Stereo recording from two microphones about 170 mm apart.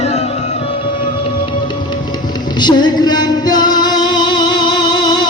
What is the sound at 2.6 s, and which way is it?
Music, 25° left (ahead or behind).